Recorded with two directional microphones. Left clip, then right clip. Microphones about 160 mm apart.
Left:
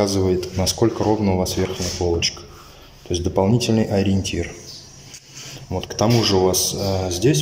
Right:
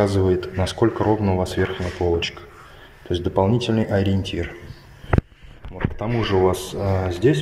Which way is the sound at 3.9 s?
45° left (ahead or behind).